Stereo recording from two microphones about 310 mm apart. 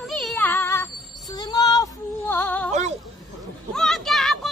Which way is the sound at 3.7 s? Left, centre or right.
Centre.